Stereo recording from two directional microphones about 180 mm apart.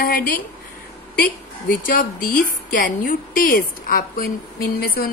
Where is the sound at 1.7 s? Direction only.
50° left (ahead or behind).